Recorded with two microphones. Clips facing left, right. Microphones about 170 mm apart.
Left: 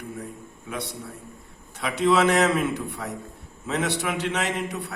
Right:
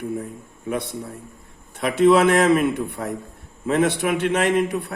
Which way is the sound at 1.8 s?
55° right (ahead or behind).